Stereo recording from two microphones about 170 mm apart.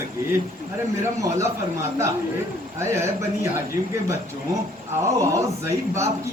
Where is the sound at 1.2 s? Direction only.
15° right (ahead or behind).